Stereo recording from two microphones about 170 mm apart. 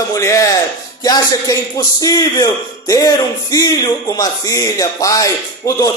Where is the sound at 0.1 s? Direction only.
20° left (ahead or behind).